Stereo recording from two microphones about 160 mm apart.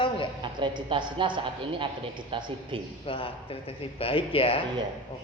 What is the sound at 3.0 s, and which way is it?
A woman's voice, 35° left (ahead or behind).